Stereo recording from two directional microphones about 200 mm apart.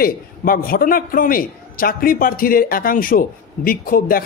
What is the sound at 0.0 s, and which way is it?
A man's voice, 45° left (ahead or behind).